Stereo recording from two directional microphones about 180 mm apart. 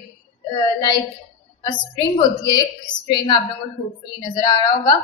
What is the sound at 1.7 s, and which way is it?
A woman's voice, 25° left (ahead or behind).